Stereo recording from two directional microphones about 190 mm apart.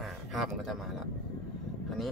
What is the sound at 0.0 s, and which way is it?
Speech, centre (ahead or behind).